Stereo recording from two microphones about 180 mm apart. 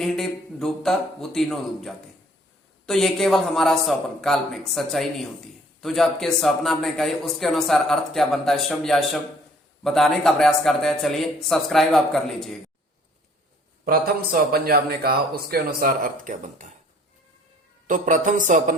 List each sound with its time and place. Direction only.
0.0 s a man's voice: centre (ahead or behind)
13.8 s a man's voice: 55° right (ahead or behind)
17.8 s a man's voice: 45° right (ahead or behind)